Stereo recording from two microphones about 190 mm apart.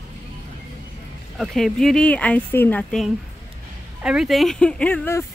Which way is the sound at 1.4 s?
Centre (ahead or behind).